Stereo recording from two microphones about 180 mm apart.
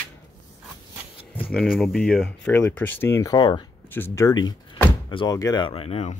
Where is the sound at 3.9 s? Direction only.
10° left (ahead or behind).